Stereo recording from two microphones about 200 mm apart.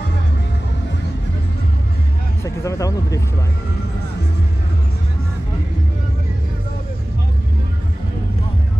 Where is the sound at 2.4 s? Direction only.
15° left (ahead or behind).